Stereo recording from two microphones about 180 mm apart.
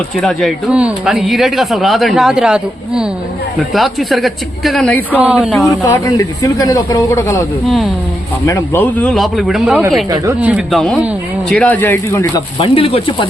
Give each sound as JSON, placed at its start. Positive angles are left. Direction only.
{"t": 0.2, "sound": "speech", "side_deg": 0}
{"t": 5.2, "sound": "speech", "side_deg": -5}
{"t": 5.6, "sound": "speech", "side_deg": 20}
{"t": 7.6, "sound": "speech", "side_deg": 0}
{"t": 8.4, "sound": "speech", "side_deg": 15}
{"t": 12.5, "sound": "speech", "side_deg": 30}